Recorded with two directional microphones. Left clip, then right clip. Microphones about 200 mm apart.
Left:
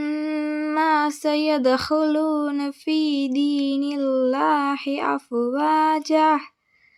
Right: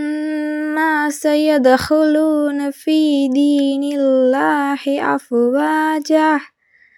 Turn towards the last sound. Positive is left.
turn(degrees=-15)  # may be behind; listen again after turning